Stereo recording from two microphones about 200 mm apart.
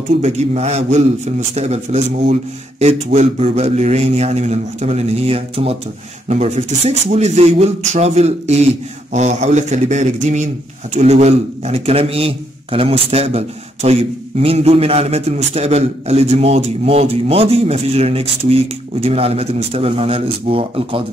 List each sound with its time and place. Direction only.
0.2 s a man's voice: 35° right (ahead or behind)